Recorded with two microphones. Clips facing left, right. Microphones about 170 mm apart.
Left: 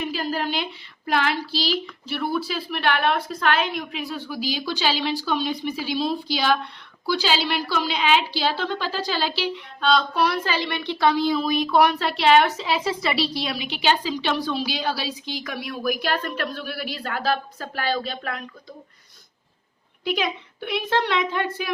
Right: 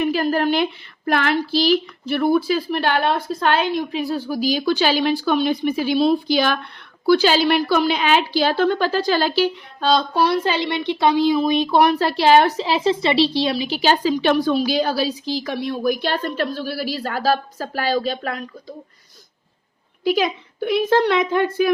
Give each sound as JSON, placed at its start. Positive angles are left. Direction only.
{"t": 0.0, "sound": "speech", "side_deg": -55}
{"t": 9.9, "sound": "speech", "side_deg": -30}
{"t": 20.1, "sound": "speech", "side_deg": -40}